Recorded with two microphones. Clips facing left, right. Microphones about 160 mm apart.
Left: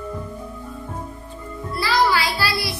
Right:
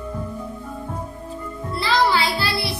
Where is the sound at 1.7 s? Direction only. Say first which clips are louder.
Even; 25° right (ahead or behind).